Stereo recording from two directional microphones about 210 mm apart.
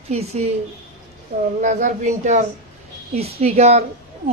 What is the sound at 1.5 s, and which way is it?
Speech, 35° right (ahead or behind).